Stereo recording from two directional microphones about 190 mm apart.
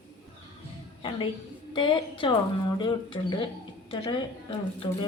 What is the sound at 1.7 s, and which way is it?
Speech, 25° left (ahead or behind).